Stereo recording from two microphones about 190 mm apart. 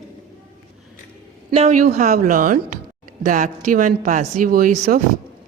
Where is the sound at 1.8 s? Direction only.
45° right (ahead or behind).